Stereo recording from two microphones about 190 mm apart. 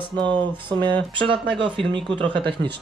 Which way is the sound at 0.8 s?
25° right (ahead or behind).